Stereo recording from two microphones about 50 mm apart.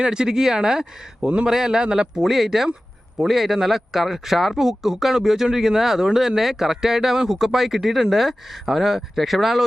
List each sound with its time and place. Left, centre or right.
0.0 s speech: centre